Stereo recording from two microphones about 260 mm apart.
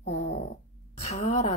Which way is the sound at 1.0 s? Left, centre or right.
Left.